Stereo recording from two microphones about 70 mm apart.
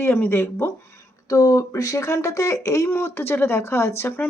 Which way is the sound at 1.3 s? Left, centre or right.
Left.